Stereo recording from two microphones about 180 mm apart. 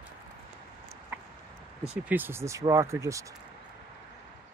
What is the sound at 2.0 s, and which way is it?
Speech, 10° right (ahead or behind).